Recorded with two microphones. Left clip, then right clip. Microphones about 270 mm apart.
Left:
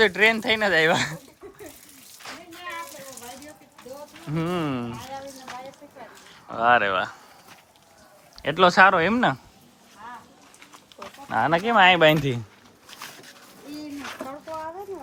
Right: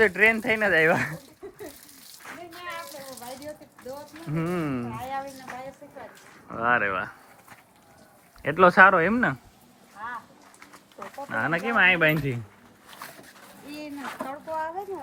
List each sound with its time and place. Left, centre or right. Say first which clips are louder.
0.0 s speech: left 1 dB; centre
2.5 s a sound: left 1 dB; centre
4.3 s speech: left 2 dB; centre
6.5 s speech: left 4 dB; centre
8.4 s speech: even; centre
11.3 s speech: left 5 dB; centre